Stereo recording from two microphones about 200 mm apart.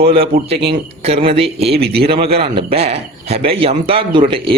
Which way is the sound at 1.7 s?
50° right (ahead or behind).